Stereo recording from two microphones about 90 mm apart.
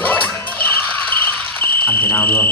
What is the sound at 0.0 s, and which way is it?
Music, 15° left (ahead or behind).